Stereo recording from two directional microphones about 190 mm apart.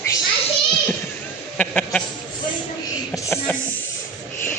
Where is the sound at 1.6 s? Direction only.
5° left (ahead or behind).